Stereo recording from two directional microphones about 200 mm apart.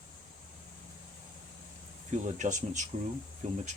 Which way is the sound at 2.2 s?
40° right (ahead or behind).